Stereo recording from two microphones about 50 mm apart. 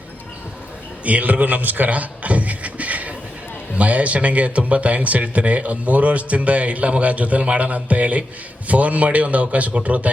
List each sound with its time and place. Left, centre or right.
1.0 s a man's voice: right